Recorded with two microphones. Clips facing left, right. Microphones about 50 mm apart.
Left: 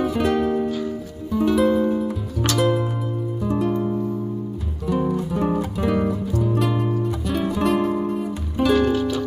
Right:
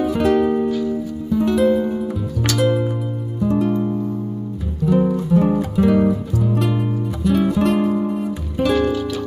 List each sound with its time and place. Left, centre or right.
0.0 s music: centre